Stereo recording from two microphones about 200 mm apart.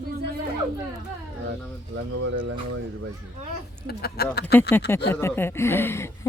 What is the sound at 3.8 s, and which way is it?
Speech, 50° left (ahead or behind).